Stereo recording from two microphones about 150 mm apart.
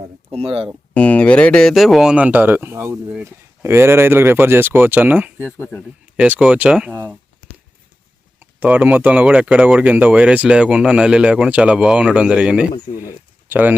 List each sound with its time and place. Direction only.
0.3 s speech: 40° right (ahead or behind)
0.9 s speech: 10° left (ahead or behind); by 5.5 s 10° right (ahead or behind)
5.5 s speech: 15° left (ahead or behind)
6.1 s speech: 10° right (ahead or behind)
8.4 s speech: 10° right (ahead or behind)
12.9 s speech: 35° left (ahead or behind)
13.5 s speech: 10° right (ahead or behind)